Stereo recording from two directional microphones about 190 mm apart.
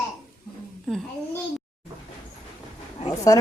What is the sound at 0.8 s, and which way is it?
Speech, 5° left (ahead or behind).